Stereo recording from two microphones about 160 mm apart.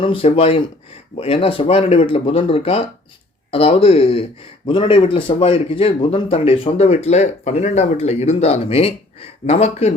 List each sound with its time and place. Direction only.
0.0 s a man's voice: 35° left (ahead or behind)